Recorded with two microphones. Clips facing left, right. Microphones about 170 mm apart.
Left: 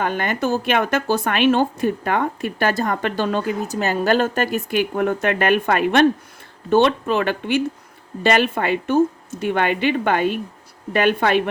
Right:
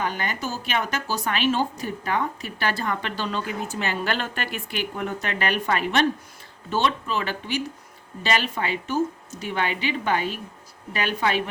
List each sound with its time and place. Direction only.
0.0 s speech: 55° left (ahead or behind)